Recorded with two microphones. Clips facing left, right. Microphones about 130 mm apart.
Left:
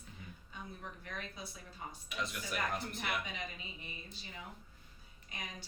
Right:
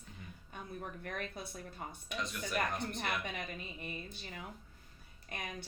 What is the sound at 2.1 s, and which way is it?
Speech, centre (ahead or behind).